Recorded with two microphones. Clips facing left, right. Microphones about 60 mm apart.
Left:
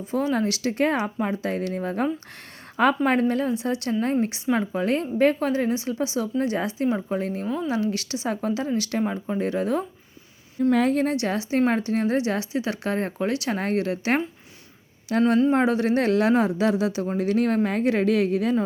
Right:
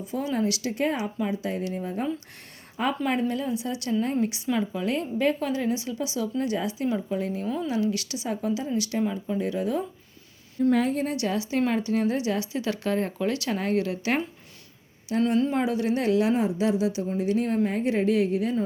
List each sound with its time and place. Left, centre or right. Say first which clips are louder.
0.1 s a woman's voice: left 3 dB; left
8.3 s speech: left 2 dB; left
10.6 s a woman's voice: left 1 dB; left
11.2 s a woman's voice: left 3 dB; left
13.5 s a woman's voice: left 1 dB; left
15.1 s a woman's voice: left 3 dB; left
15.5 s speech: left 4 dB; left